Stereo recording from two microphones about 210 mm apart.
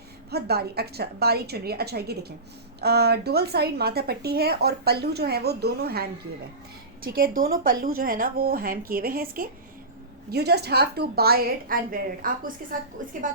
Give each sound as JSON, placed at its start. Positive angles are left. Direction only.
{"t": 0.3, "sound": "a woman's voice", "side_deg": -50}